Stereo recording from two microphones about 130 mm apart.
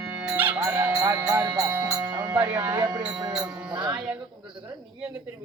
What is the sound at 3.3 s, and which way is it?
Speech, 10° right (ahead or behind).